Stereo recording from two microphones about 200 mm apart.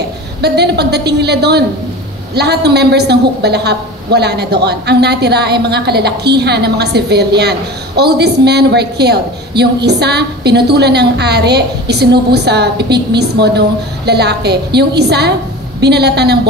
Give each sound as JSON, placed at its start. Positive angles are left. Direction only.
{"t": 0.4, "sound": "a woman's voice", "side_deg": -55}